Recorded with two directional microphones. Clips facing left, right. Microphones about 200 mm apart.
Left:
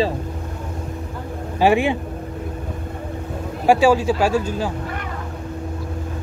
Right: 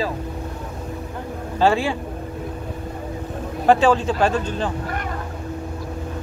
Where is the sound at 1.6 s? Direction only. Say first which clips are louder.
Left 2 dB; 15° left (ahead or behind).